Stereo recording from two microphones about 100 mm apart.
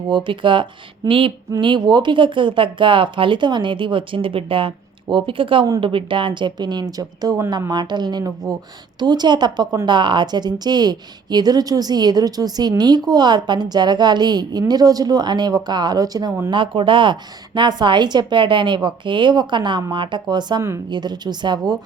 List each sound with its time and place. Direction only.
0.1 s speech: 55° right (ahead or behind)
1.6 s a woman's voice: 50° right (ahead or behind)
16.5 s a woman's voice: 55° right (ahead or behind)